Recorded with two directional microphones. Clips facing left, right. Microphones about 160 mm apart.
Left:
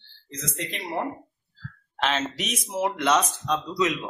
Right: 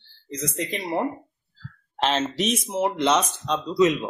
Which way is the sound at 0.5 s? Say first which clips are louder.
Right 4 dB; 40° right (ahead or behind).